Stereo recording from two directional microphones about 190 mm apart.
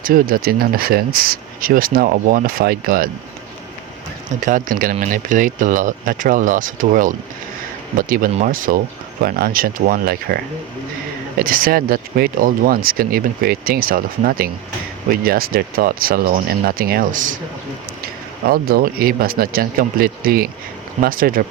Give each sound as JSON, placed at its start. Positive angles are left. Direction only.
{"t": 0.0, "sound": "speech", "side_deg": -50}
{"t": 4.4, "sound": "speech", "side_deg": -40}